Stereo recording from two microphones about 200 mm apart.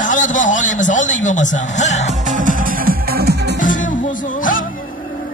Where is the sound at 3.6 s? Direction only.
40° left (ahead or behind).